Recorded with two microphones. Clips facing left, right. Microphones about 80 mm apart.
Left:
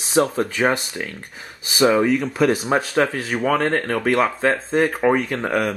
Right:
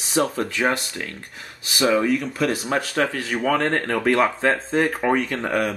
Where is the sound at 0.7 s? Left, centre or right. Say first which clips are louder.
Left 2 dB; centre.